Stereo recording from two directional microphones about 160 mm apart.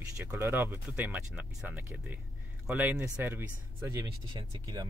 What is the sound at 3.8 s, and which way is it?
Speech, 25° right (ahead or behind).